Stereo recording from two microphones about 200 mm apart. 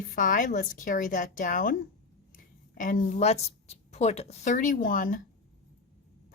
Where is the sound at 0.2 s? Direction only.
40° left (ahead or behind).